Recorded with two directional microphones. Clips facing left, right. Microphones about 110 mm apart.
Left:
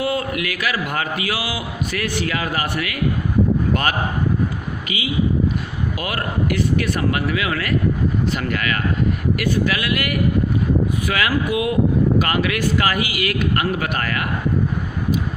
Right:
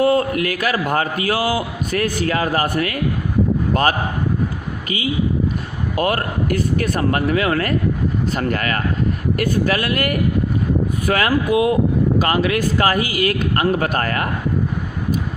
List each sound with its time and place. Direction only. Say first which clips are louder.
0.0 s a man's voice: right 6 dB; 40° right (ahead or behind)
6.0 s a man's voice: right 6 dB; 40° right (ahead or behind)